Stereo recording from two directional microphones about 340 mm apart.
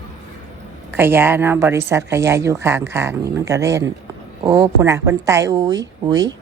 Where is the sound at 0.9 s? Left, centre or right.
Centre.